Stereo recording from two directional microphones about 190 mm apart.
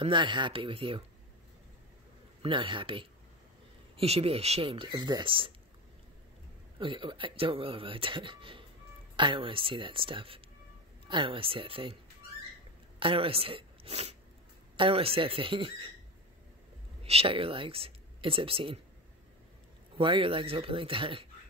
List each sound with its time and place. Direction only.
0.0 s speech: 25° right (ahead or behind)
2.4 s speech: 25° right (ahead or behind)
6.8 s speech: 25° right (ahead or behind)
13.0 s speech: 30° right (ahead or behind)
17.0 s speech: 30° right (ahead or behind)
20.0 s speech: 30° right (ahead or behind)